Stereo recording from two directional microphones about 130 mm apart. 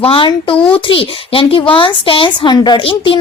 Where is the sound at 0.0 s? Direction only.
45° left (ahead or behind).